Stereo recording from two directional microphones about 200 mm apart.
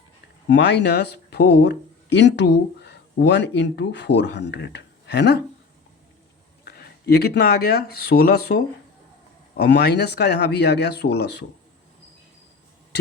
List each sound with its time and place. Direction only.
0.5 s speech: 60° left (ahead or behind)
6.7 s speech: 50° left (ahead or behind)